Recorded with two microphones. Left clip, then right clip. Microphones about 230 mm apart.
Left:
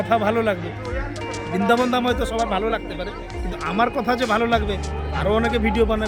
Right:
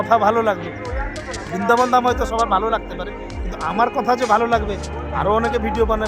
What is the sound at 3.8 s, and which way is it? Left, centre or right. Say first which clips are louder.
Speech: right 3 dB; centre.